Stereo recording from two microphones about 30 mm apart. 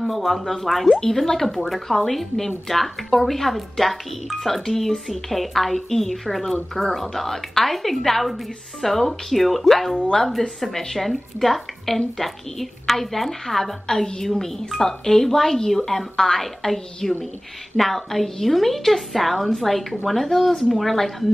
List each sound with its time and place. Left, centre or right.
0.0 s a woman's voice: centre
0.8 s a woman's voice: centre
10.4 s a woman's voice: left
11.0 s a woman's voice: centre
13.8 s a woman's voice: left
14.4 s a woman's voice: centre